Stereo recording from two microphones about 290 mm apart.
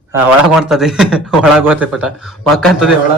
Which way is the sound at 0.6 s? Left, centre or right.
Centre.